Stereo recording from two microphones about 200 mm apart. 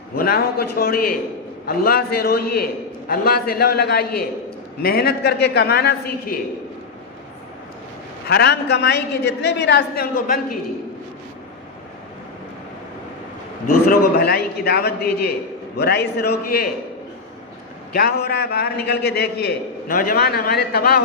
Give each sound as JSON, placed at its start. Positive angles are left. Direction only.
{"t": 0.2, "sound": "a man's voice", "side_deg": 50}
{"t": 8.3, "sound": "a man's voice", "side_deg": 55}
{"t": 13.8, "sound": "a man's voice", "side_deg": 50}
{"t": 17.9, "sound": "a man's voice", "side_deg": 50}